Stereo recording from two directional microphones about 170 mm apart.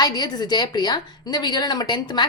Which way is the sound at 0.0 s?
25° left (ahead or behind).